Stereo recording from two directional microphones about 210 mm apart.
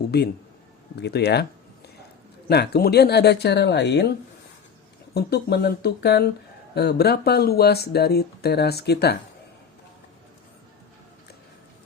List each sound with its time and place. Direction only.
0.9 s speech: 50° left (ahead or behind)
2.5 s speech: 50° left (ahead or behind)
5.1 s speech: 50° left (ahead or behind)